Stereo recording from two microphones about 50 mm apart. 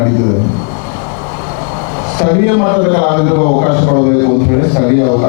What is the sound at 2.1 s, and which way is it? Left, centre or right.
A man's voice, left.